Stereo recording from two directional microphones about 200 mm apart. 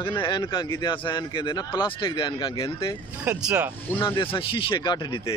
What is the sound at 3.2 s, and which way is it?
Speech, 5° right (ahead or behind).